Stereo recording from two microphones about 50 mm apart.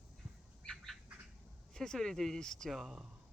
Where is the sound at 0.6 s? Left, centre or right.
Centre.